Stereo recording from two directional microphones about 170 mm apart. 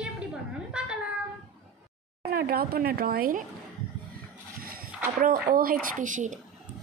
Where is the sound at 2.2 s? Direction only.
65° right (ahead or behind).